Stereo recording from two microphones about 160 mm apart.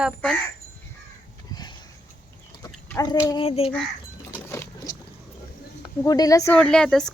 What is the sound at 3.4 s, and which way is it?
Fowl, 40° left (ahead or behind).